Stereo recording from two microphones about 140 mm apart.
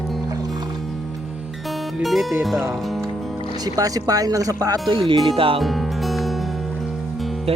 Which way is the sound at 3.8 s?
25° right (ahead or behind).